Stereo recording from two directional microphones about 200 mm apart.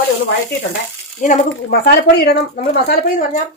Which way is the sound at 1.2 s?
35° left (ahead or behind).